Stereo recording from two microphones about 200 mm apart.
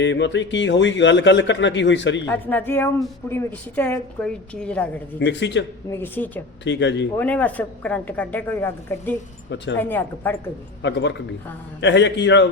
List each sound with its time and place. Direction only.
0.0 s a man's voice: 65° left (ahead or behind)
2.2 s a woman's voice: 10° left (ahead or behind)
5.2 s a man's voice: 60° left (ahead or behind)
5.9 s a woman's voice: 10° left (ahead or behind)
6.7 s a man's voice: 65° left (ahead or behind)
7.2 s a woman's voice: 5° left (ahead or behind)
10.8 s a man's voice: 60° left (ahead or behind)